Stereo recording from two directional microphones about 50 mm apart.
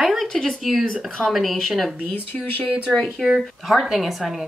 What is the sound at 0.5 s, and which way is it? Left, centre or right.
Speech, centre.